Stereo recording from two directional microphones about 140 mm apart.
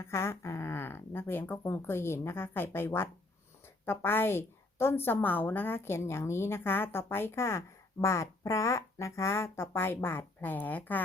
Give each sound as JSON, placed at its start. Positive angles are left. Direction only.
{"t": 0.0, "sound": "a woman's voice", "side_deg": 20}